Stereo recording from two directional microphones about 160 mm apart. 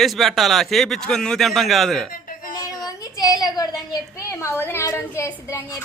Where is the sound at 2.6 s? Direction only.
25° left (ahead or behind).